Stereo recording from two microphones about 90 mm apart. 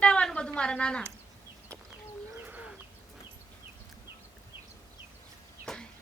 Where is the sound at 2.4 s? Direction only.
15° right (ahead or behind).